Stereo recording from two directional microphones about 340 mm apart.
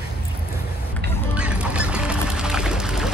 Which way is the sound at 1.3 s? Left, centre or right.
Centre.